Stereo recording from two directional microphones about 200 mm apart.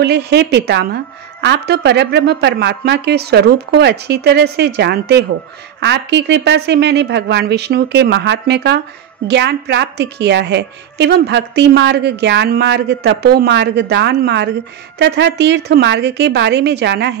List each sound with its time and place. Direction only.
0.0 s a woman's voice: 55° right (ahead or behind)